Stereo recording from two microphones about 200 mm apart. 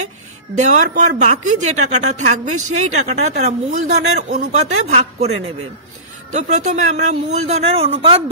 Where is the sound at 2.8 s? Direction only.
35° right (ahead or behind).